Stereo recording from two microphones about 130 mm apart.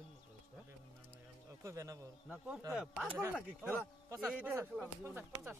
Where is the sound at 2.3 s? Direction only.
10° right (ahead or behind).